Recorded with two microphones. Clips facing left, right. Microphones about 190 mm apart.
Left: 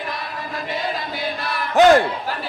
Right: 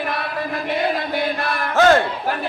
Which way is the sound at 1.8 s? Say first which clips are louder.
Left 2 dB; 15° left (ahead or behind).